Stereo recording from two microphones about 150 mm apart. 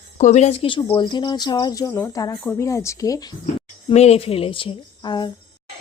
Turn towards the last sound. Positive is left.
turn(degrees=30)  # may be behind; listen again after turning